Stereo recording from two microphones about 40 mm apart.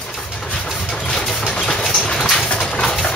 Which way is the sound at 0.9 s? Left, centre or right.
Centre.